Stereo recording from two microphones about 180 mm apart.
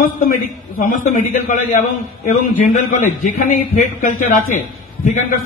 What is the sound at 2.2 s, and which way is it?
A man's voice, 45° left (ahead or behind).